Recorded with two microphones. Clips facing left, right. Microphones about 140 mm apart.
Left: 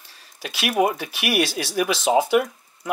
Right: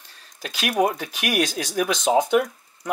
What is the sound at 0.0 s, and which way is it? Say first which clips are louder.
Speech: left 1 dB; 5° left (ahead or behind).